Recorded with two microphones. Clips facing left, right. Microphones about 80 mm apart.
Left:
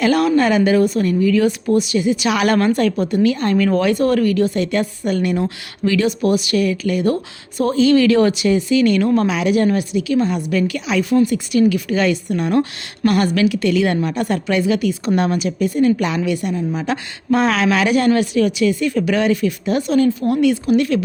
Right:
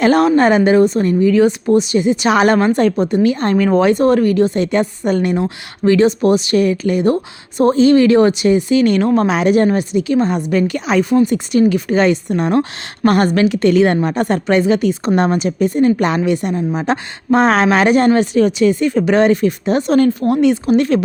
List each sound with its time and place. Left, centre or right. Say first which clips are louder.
0.0 s a woman's voice: right 4 dB; right